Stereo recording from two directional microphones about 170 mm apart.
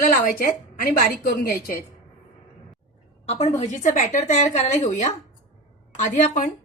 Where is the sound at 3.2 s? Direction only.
40° left (ahead or behind).